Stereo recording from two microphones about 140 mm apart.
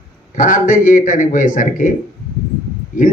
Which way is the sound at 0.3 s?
70° left (ahead or behind).